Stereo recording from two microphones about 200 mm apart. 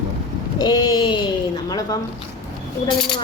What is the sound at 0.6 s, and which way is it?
Bleat, 20° left (ahead or behind).